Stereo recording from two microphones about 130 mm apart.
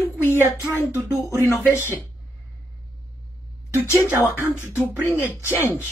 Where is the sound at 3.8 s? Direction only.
20° left (ahead or behind).